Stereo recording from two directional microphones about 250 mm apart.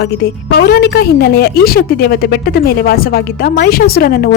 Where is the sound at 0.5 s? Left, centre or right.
Left.